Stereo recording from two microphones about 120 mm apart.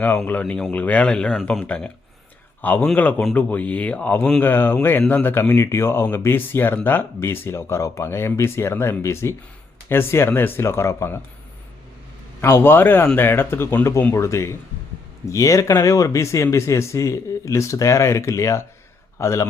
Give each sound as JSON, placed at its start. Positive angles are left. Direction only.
{"t": 0.3, "sound": "speech", "side_deg": 10}
{"t": 12.4, "sound": "speech", "side_deg": 20}